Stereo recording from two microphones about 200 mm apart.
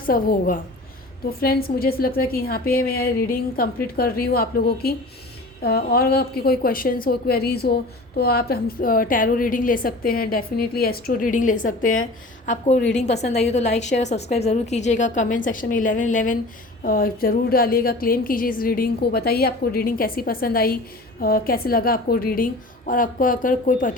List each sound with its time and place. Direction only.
0.0 s a woman's voice: 45° left (ahead or behind)